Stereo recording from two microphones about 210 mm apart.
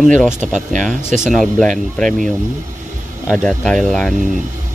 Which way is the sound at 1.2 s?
Centre (ahead or behind).